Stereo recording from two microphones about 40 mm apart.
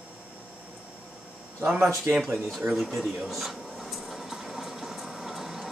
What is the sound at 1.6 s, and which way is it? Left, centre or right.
Speech, right.